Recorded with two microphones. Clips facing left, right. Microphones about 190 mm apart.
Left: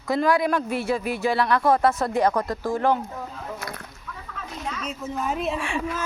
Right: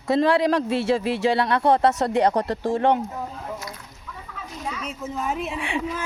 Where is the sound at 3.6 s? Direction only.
55° left (ahead or behind).